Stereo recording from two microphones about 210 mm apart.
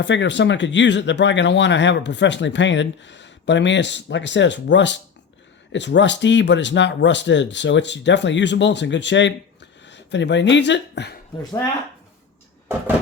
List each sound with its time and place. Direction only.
0.0 s speech: 60° left (ahead or behind)